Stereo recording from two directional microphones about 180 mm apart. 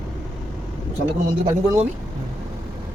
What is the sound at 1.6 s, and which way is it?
Speech, 15° right (ahead or behind).